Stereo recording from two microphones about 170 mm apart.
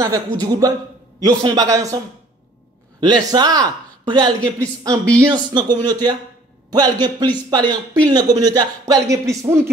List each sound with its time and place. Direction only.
0.0 s a man's voice: 20° right (ahead or behind)
3.0 s a man's voice: 25° right (ahead or behind)